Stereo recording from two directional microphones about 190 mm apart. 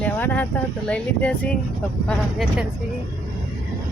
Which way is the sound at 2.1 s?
Centre (ahead or behind).